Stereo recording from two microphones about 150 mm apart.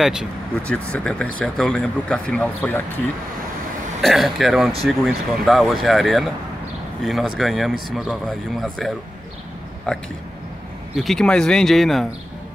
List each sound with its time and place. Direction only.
0.0 s speech: 5° right (ahead or behind)
0.6 s speech: 10° left (ahead or behind)
4.0 s speech: centre (ahead or behind)